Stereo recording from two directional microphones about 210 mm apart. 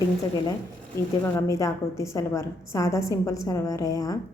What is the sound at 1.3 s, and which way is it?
A woman's voice, 15° left (ahead or behind).